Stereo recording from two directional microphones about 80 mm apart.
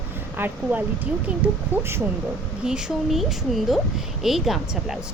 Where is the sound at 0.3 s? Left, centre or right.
Right.